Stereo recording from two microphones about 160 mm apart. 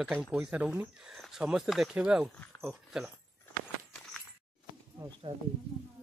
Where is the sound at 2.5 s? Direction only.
15° left (ahead or behind).